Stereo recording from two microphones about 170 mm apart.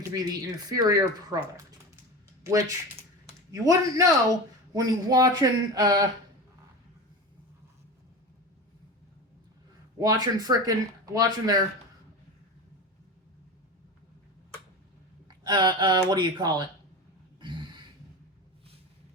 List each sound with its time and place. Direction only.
0.1 s speech: 20° right (ahead or behind)
10.0 s speech: 20° right (ahead or behind)
15.3 s speech: 25° right (ahead or behind)